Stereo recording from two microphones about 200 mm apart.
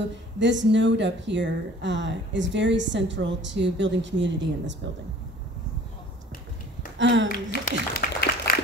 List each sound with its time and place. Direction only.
0.4 s speech: 65° right (ahead or behind)
7.0 s speech: 65° right (ahead or behind)
7.2 s a sound: 45° left (ahead or behind)